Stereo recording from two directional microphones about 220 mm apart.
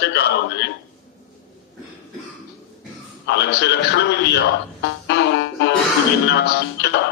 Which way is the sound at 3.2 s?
50° left (ahead or behind).